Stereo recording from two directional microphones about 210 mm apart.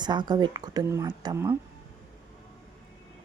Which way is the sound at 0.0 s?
20° right (ahead or behind).